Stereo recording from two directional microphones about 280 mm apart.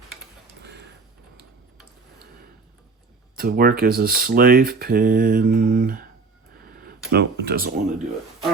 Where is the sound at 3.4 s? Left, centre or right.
Right.